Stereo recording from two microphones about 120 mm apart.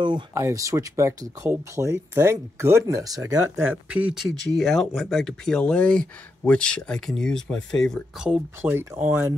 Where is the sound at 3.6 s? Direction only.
10° right (ahead or behind); by 8.0 s 5° left (ahead or behind).